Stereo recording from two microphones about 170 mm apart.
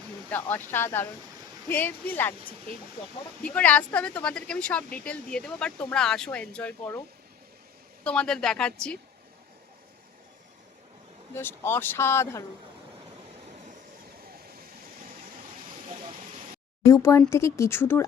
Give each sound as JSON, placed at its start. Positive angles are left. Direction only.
{"t": 0.3, "sound": "speech", "side_deg": 10}
{"t": 3.4, "sound": "speech", "side_deg": 10}
{"t": 8.0, "sound": "speech", "side_deg": 5}
{"t": 11.3, "sound": "speech", "side_deg": 15}
{"t": 16.8, "sound": "speech", "side_deg": 20}